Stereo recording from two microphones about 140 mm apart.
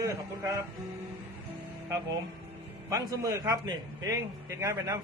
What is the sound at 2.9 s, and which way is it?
Speech, 20° right (ahead or behind).